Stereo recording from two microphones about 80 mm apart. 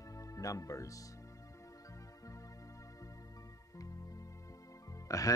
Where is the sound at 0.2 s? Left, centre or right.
Left.